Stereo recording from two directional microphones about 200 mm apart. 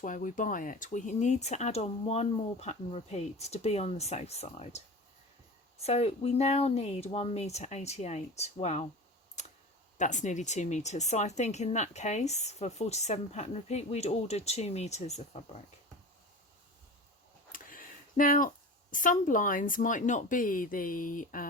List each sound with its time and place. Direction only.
0.0 s speech: 40° left (ahead or behind)
9.4 s computer keyboard: 35° left (ahead or behind)
10.0 s speech: 35° left (ahead or behind)
17.5 s speech: 45° left (ahead or behind)